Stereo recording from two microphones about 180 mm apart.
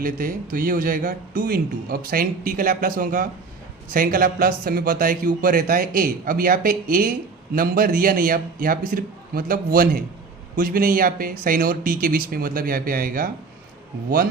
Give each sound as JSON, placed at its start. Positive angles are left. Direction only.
{"t": 0.0, "sound": "a man's voice", "side_deg": -50}